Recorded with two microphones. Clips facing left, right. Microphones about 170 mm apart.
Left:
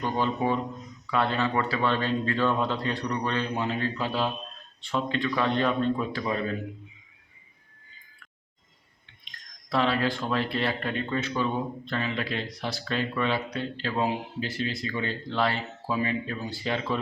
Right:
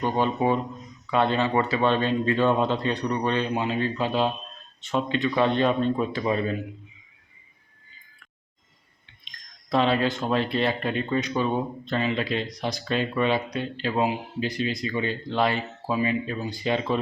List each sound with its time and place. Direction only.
0.0 s speech: 20° right (ahead or behind)
9.6 s speech: 20° right (ahead or behind)